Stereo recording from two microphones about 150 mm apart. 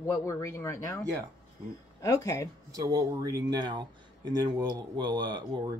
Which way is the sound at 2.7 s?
25° right (ahead or behind).